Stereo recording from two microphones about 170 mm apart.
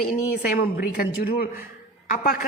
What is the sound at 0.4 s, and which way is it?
A woman's voice, 60° left (ahead or behind).